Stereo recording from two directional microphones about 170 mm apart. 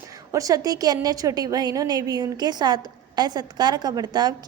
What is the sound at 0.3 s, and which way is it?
A woman's voice, 20° right (ahead or behind).